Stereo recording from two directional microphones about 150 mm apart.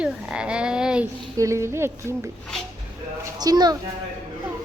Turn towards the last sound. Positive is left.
turn(degrees=-25)  # may be behind; listen again after turning